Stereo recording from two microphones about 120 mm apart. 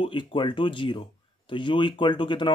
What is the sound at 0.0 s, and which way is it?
Speech, 45° left (ahead or behind).